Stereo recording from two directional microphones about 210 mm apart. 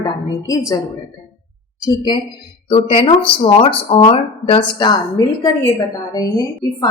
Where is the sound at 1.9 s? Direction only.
20° left (ahead or behind).